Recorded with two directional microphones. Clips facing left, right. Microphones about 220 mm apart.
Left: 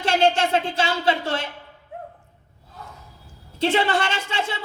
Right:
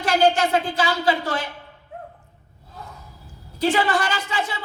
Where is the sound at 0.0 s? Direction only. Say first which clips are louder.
Right 1 dB; 25° left (ahead or behind).